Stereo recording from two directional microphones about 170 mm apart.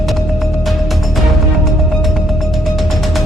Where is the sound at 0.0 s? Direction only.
Centre (ahead or behind).